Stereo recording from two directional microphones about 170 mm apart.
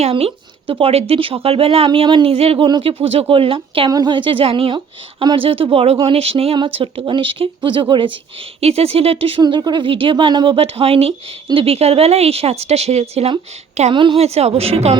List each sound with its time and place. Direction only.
0.0 s speech: 35° right (ahead or behind)